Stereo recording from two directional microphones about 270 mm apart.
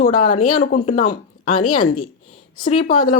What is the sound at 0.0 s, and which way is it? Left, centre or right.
Speech, left.